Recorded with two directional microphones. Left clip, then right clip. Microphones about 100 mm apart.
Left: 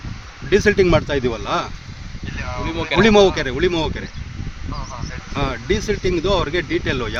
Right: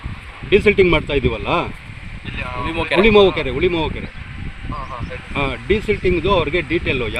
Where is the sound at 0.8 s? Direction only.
55° left (ahead or behind).